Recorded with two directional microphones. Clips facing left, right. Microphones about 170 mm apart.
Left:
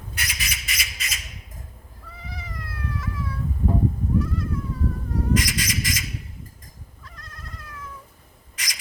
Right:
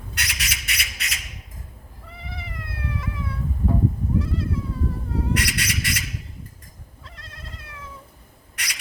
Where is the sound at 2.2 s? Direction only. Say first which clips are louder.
Right 1 dB; 25° right (ahead or behind).